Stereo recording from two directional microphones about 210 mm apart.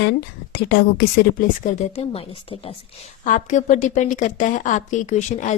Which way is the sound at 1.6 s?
30° left (ahead or behind).